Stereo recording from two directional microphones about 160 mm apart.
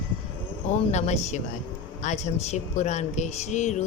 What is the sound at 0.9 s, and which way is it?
Speech, 45° left (ahead or behind).